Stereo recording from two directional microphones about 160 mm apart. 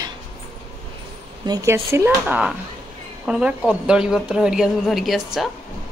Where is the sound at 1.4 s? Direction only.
25° right (ahead or behind); by 5.5 s centre (ahead or behind).